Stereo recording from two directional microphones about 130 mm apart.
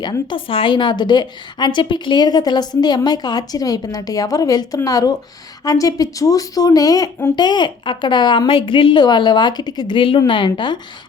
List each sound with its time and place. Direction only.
0.0 s a woman's voice: 35° left (ahead or behind)
7.3 s a woman's voice: 35° left (ahead or behind)